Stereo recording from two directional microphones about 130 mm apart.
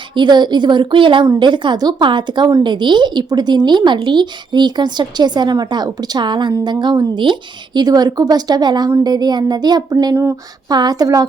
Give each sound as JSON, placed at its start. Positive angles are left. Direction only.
{"t": 0.1, "sound": "a woman's voice", "side_deg": -35}